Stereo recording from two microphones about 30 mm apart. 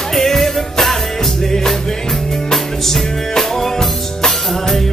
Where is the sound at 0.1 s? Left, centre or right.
Centre.